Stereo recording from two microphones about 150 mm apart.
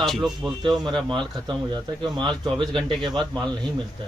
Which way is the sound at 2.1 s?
30° right (ahead or behind).